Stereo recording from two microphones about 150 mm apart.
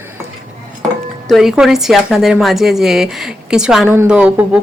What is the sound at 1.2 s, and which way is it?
Speech, centre (ahead or behind).